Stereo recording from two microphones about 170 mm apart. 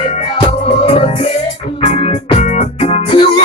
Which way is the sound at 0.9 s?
35° left (ahead or behind).